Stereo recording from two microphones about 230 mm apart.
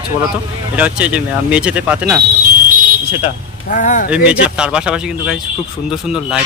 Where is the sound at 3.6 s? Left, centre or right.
Left.